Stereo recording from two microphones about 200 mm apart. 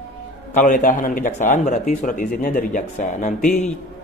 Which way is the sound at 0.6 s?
40° left (ahead or behind).